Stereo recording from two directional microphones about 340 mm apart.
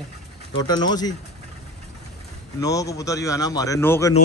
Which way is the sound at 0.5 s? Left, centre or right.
Centre.